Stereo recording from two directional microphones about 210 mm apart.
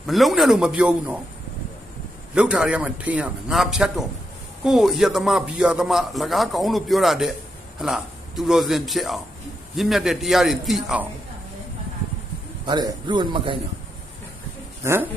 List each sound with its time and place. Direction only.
0.1 s a man's voice: centre (ahead or behind)
2.3 s a man's voice: 5° right (ahead or behind)
12.6 s a man's voice: 20° right (ahead or behind)
14.8 s speech: 15° right (ahead or behind)